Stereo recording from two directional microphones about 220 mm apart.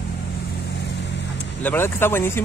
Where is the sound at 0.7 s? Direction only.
50° left (ahead or behind).